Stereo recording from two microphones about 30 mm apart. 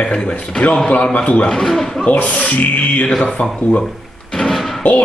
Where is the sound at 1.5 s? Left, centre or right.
Centre.